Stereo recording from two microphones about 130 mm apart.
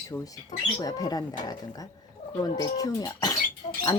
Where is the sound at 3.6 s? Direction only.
45° left (ahead or behind).